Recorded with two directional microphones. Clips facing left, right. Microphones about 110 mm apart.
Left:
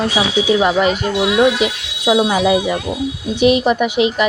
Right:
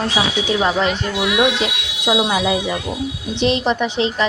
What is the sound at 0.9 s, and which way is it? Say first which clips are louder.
Speech: left 4 dB; 30° left (ahead or behind).